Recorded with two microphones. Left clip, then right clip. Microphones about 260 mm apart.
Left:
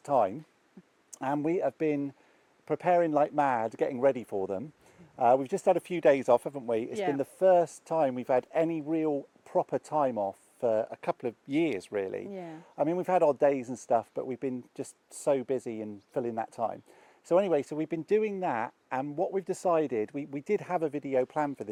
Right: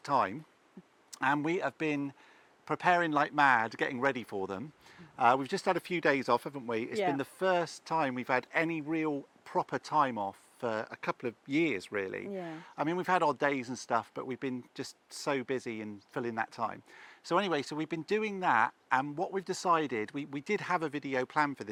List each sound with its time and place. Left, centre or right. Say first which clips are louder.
0.0 s speech: left 3 dB; right
1.5 s speech: left 4 dB; right
3.1 s speech: even; right
12.3 s speech: right 1 dB; centre
12.5 s speech: left 5 dB; right
17.7 s speech: left 4 dB; right